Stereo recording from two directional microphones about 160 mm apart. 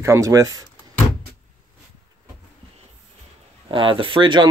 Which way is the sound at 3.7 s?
35° right (ahead or behind).